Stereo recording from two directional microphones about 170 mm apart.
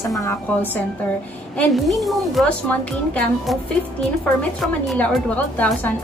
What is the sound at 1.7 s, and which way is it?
Speech, centre (ahead or behind).